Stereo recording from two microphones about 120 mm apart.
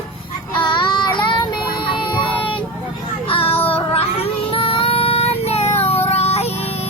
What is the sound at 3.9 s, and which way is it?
Child singing, 55° left (ahead or behind).